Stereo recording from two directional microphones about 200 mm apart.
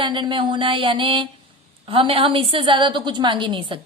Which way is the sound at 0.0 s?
25° right (ahead or behind).